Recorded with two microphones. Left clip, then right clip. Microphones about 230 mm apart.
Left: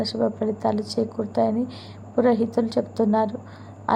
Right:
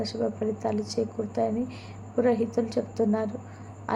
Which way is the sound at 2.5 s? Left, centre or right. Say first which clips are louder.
Left 4 dB; centre.